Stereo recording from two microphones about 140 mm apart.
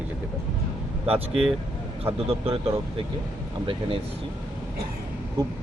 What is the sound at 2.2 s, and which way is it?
Speech, 45° right (ahead or behind).